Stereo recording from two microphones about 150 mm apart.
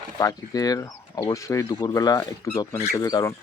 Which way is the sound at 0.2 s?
25° left (ahead or behind).